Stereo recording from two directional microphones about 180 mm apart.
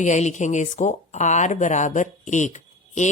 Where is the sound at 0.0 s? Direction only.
40° left (ahead or behind).